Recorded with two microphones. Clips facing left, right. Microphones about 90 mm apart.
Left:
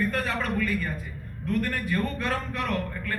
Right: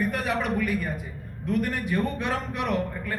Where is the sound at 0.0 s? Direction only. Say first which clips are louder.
Right 1 dB; 20° right (ahead or behind).